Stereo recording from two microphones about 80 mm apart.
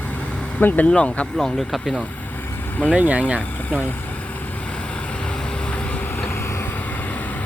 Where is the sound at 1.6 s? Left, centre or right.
Centre.